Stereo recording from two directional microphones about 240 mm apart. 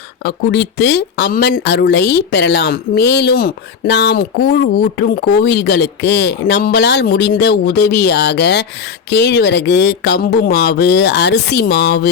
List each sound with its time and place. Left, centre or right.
0.3 s speech: left